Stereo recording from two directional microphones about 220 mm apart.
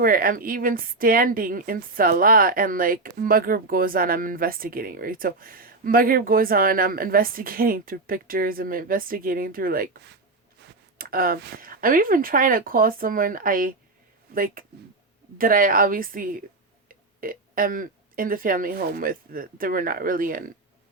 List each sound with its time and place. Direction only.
0.0 s a woman's voice: 40° right (ahead or behind)